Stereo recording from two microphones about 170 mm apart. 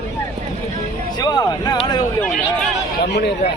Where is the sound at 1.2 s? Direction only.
25° left (ahead or behind).